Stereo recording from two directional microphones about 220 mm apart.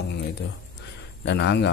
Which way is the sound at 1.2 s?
55° left (ahead or behind).